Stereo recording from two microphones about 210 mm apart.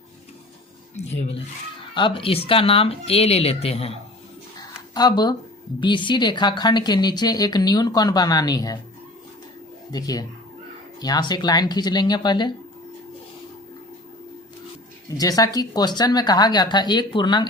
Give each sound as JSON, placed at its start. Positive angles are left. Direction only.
{"t": 2.0, "sound": "a woman's voice", "side_deg": 25}
{"t": 4.9, "sound": "a woman's voice", "side_deg": 20}
{"t": 9.9, "sound": "a woman's voice", "side_deg": 15}
{"t": 15.2, "sound": "a woman's voice", "side_deg": 15}